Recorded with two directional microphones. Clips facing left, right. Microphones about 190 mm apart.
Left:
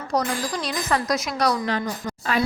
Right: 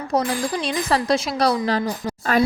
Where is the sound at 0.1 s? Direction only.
25° right (ahead or behind).